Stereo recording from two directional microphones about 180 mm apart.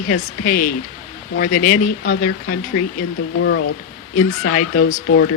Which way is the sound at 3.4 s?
90° left.